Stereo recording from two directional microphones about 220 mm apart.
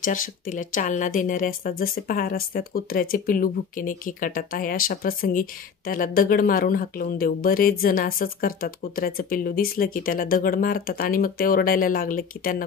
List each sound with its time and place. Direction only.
0.0 s speech: 35° left (ahead or behind)